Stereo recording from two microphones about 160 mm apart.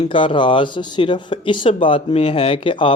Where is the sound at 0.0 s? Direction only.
30° left (ahead or behind).